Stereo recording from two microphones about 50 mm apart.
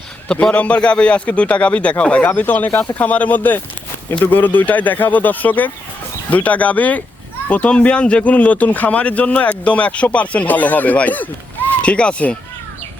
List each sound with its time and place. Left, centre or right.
0.5 s speech: left